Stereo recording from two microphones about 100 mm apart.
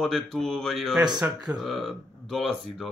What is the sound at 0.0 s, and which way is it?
Speech, 5° left (ahead or behind).